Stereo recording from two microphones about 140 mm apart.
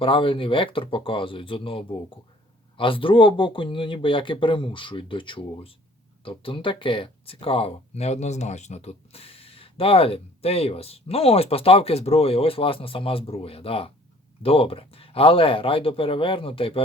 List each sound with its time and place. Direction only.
0.0 s speech: 40° left (ahead or behind)